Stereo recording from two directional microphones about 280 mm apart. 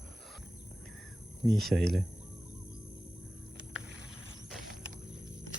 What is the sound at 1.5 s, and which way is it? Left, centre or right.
Speech, centre.